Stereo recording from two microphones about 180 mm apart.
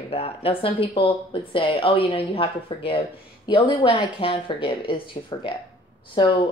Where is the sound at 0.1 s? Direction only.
35° left (ahead or behind).